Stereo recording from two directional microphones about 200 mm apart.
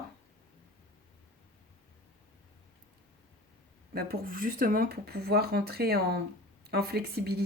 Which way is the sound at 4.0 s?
45° right (ahead or behind).